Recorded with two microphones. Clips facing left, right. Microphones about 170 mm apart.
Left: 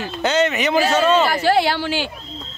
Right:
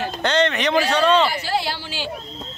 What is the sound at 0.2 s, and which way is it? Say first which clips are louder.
Speech: left 2 dB; 5° left (ahead or behind).